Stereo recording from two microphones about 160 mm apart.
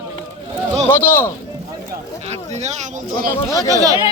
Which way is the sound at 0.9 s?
15° left (ahead or behind).